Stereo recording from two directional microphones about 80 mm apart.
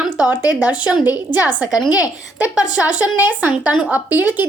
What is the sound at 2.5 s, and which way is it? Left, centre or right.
A woman's voice, centre.